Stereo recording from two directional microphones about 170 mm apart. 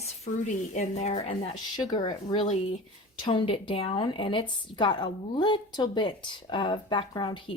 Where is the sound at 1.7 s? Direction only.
25° left (ahead or behind).